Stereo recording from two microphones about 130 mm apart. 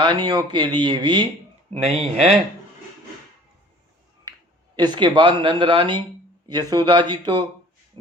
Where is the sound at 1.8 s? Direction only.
55° right (ahead or behind).